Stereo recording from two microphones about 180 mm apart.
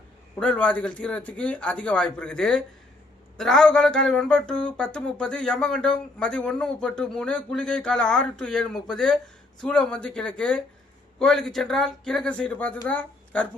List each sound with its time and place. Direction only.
0.3 s speech: 5° left (ahead or behind)